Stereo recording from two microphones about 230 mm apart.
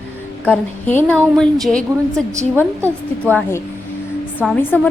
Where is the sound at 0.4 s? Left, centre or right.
Centre.